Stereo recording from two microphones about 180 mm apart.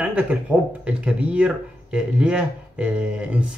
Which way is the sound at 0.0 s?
5° right (ahead or behind).